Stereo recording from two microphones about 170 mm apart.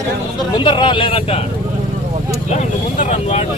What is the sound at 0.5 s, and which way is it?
Speech, 30° left (ahead or behind).